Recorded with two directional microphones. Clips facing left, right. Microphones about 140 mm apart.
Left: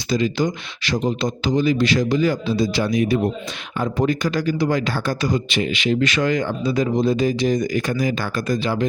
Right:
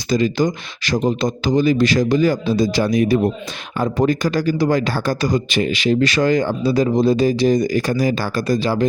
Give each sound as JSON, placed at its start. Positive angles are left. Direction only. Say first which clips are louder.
{"t": 0.1, "sound": "speech", "louder": "right 3 dB", "side_deg": -45}